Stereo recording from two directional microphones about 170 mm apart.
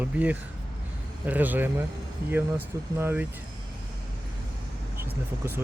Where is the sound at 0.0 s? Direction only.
10° right (ahead or behind).